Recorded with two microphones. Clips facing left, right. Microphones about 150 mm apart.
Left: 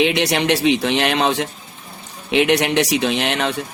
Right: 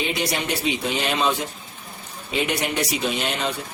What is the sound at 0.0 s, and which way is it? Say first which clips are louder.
Speech: left 8 dB; 75° left (ahead or behind).